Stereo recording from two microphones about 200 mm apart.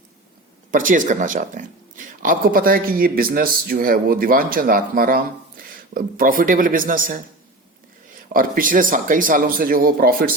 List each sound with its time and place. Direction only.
0.7 s speech: 40° right (ahead or behind)
8.3 s speech: 45° right (ahead or behind)